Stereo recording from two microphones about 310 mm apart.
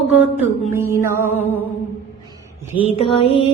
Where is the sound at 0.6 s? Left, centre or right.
Centre.